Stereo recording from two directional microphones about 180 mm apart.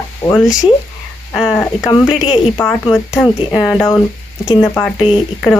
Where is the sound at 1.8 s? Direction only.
25° left (ahead or behind).